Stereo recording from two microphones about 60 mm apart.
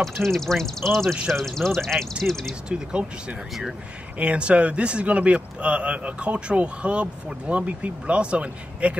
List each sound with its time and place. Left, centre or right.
0.0 s speech: centre
2.7 s a man's voice: centre